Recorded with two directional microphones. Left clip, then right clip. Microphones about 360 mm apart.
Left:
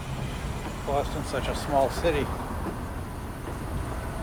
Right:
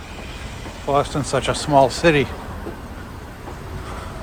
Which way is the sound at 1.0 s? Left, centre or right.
Centre.